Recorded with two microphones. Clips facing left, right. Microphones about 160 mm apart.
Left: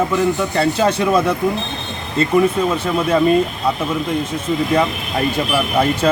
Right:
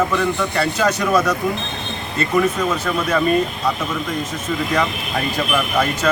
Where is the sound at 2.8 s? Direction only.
30° left (ahead or behind).